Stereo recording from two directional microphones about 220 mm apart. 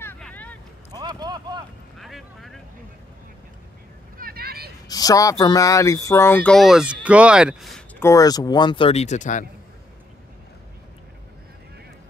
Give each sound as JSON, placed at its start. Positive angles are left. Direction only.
{"t": 0.0, "sound": "vehicle", "side_deg": 10}
{"t": 0.9, "sound": "a sound", "side_deg": -20}
{"t": 2.0, "sound": "vehicle", "side_deg": 0}
{"t": 4.2, "sound": "vehicle", "side_deg": -45}
{"t": 4.8, "sound": "speech", "side_deg": 15}
{"t": 8.0, "sound": "speech", "side_deg": 15}